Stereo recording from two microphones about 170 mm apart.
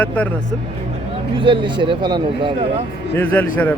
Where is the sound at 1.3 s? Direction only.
30° right (ahead or behind).